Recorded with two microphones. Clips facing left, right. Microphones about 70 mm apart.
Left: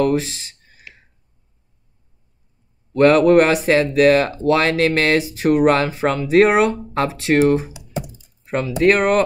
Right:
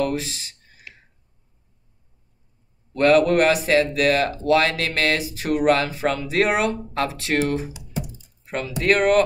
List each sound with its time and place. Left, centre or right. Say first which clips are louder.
0.0 s a sound: left 6 dB; left
2.9 s speech: left 4 dB; left
8.8 s speech: left 2 dB; left